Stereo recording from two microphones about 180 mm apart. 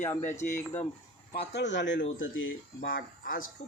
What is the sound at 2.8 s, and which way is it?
Speech, 55° left (ahead or behind).